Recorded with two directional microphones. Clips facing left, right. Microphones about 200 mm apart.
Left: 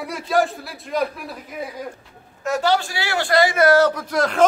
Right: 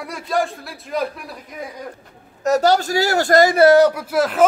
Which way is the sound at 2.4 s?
40° right (ahead or behind).